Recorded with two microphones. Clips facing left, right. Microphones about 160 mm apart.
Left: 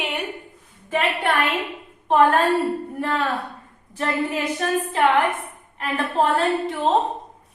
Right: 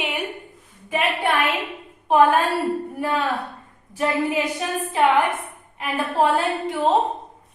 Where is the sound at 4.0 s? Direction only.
10° right (ahead or behind).